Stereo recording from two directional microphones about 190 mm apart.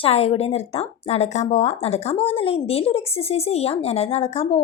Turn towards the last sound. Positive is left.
turn(degrees=35)  # may be behind; listen again after turning